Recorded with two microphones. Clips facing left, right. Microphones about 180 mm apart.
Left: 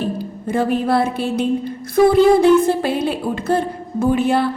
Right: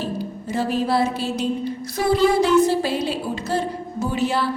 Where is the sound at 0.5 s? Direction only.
55° left (ahead or behind).